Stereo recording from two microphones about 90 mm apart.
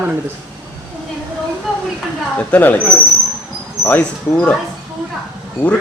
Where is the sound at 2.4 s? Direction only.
20° left (ahead or behind).